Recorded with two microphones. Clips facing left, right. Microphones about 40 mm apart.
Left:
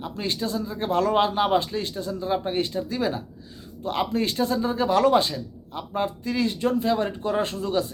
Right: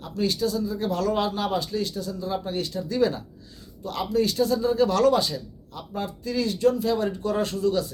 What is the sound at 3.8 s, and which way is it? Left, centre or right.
A man's voice, left.